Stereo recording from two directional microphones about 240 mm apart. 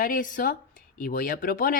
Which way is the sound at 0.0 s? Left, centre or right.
Left.